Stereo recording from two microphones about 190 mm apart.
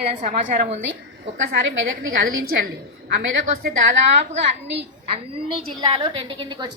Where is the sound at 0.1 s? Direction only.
40° right (ahead or behind).